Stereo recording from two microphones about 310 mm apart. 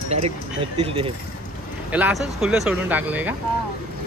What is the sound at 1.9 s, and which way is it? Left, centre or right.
Speech, centre.